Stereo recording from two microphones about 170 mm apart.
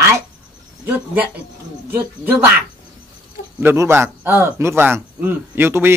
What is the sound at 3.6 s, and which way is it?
A man's voice, 15° right (ahead or behind).